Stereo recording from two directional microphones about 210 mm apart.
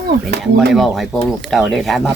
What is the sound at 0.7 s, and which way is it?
Speech, centre (ahead or behind).